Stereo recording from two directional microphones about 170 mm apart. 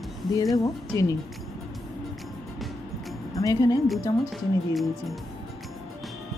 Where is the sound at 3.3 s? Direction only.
20° left (ahead or behind).